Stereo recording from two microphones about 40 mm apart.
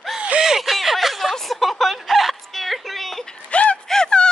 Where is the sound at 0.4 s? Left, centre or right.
Centre.